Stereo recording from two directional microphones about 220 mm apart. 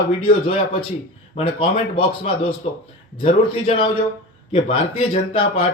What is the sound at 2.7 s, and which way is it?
A man's voice, 30° left (ahead or behind).